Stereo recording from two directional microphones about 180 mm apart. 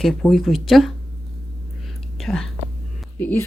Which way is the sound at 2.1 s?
Centre (ahead or behind).